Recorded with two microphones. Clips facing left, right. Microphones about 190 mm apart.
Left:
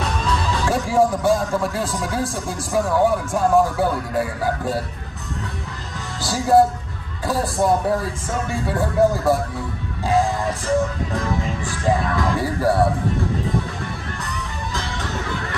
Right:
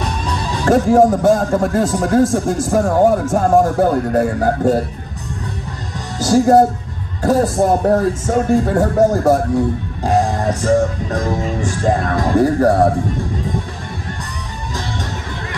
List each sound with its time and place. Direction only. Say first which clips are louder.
0.0 s music: right 1 dB; 15° right (ahead or behind)
0.7 s a man's voice: right 8 dB; 50° right (ahead or behind)
6.1 s a man's voice: right 6 dB; 45° right (ahead or behind)
7.6 s a man's voice: right 3 dB; 45° right (ahead or behind)
10.0 s music: right 3 dB; 50° right (ahead or behind)
11.8 s a man's voice: right 3 dB; 50° right (ahead or behind)